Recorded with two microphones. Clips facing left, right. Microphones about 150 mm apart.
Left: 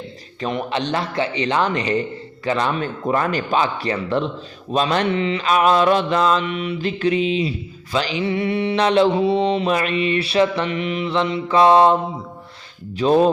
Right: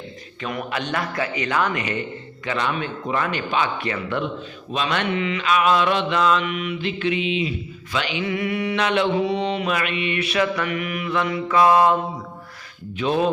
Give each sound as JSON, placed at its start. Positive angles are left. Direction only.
{"t": 0.4, "sound": "speech", "side_deg": 30}
{"t": 9.1, "sound": "mantra", "side_deg": 30}
{"t": 13.0, "sound": "speech", "side_deg": 35}